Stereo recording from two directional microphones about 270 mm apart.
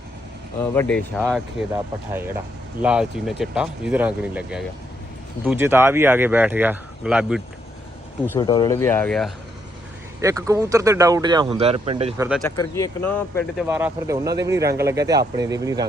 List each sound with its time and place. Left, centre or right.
0.6 s speech: centre
8.2 s speech: centre
10.2 s speech: centre
12.5 s speech: centre
13.7 s speech: centre